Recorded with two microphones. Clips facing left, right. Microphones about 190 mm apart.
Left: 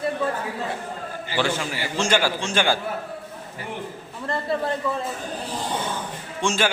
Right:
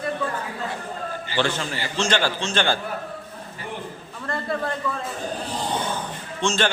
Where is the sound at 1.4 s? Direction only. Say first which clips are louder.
Even; 10° left (ahead or behind).